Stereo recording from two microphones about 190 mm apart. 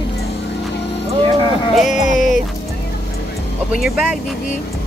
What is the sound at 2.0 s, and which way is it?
Music, 40° left (ahead or behind).